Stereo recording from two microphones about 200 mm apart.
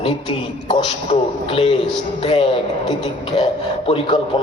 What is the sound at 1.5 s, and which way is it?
A man's voice, 25° left (ahead or behind).